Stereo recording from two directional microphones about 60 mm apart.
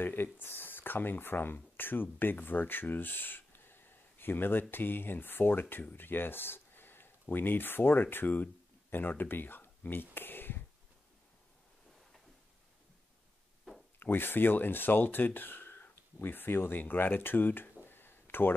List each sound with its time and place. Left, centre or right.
0.0 s speech: left
13.9 s speech: left
17.8 s a sound: left